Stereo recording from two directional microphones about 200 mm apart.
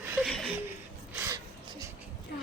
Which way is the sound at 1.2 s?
20° right (ahead or behind).